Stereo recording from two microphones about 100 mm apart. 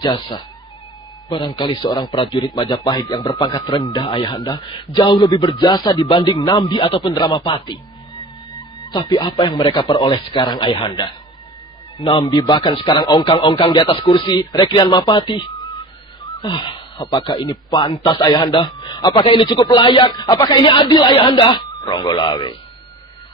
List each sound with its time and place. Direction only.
0.0 s a man's voice: 50° left (ahead or behind)
8.5 s music: 45° left (ahead or behind)
9.7 s speech: 70° left (ahead or behind)
9.9 s a man's voice: 50° left (ahead or behind)
12.0 s a man's voice: 90° left
12.3 s a man's voice: 45° left (ahead or behind)
16.3 s a man's voice: 50° left (ahead or behind)